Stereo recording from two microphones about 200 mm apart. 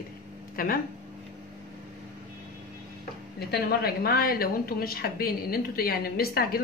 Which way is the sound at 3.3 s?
50° left (ahead or behind).